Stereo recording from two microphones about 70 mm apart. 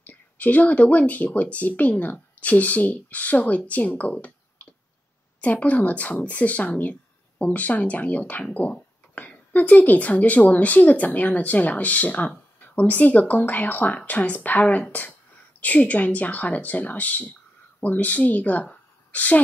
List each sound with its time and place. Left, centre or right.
0.0 s a woman's voice: left